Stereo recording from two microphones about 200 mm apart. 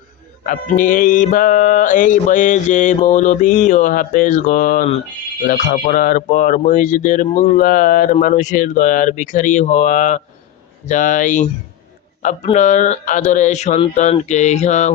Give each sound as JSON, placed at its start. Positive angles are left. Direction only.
{"t": 0.4, "sound": "mantra", "side_deg": 40}